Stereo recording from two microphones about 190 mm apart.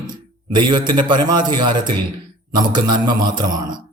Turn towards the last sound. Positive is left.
turn(degrees=-25)  # may be behind; listen again after turning